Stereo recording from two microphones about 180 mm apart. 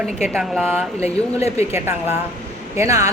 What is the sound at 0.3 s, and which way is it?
Speech, centre (ahead or behind).